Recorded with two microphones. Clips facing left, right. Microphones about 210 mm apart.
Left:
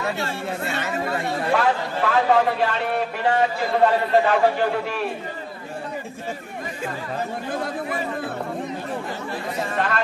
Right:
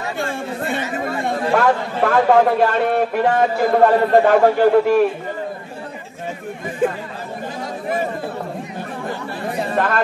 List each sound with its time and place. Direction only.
0.9 s a man's voice: 50° right (ahead or behind)
9.8 s music: 50° right (ahead or behind)